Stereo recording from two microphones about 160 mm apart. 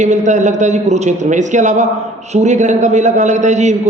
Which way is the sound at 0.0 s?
50° right (ahead or behind).